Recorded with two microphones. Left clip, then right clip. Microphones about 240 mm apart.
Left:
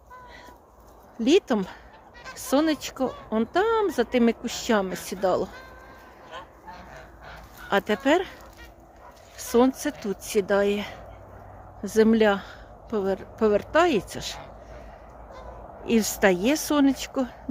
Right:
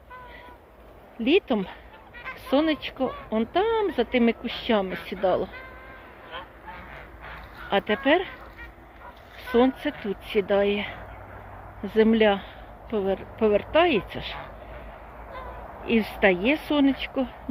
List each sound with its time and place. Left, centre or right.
1.2 s a woman's voice: left
6.3 s honk: left
7.7 s a woman's voice: centre
9.5 s a woman's voice: left
15.9 s a woman's voice: left